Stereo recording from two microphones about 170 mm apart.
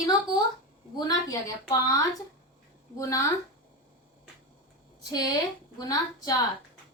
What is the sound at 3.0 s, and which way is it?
Speech, 20° left (ahead or behind).